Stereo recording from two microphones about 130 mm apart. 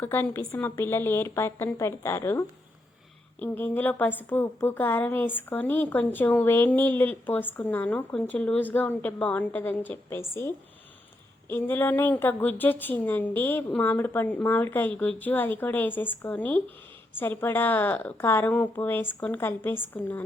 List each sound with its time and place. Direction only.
0.0 s a woman's voice: 15° left (ahead or behind)
3.4 s a woman's voice: 15° left (ahead or behind)